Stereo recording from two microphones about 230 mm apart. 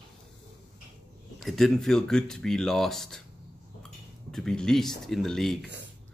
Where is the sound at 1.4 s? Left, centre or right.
Centre.